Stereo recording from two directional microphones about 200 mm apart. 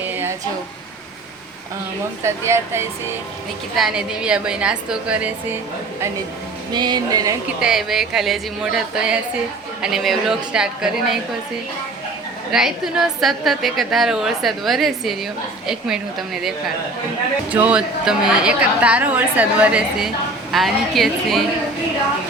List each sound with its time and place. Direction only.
2.2 s a woman's voice: 15° right (ahead or behind)
6.7 s music: 20° right (ahead or behind)
7.6 s a woman's voice: centre (ahead or behind)
12.5 s a woman's voice: centre (ahead or behind)